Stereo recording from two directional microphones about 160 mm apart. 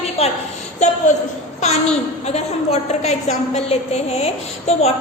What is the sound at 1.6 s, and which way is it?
A woman's voice, 40° left (ahead or behind).